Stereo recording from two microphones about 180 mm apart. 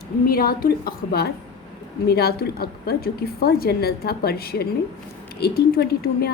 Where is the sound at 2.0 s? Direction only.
60° left (ahead or behind).